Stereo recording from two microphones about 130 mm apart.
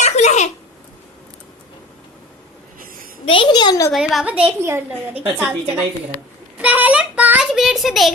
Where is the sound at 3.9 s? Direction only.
Centre (ahead or behind).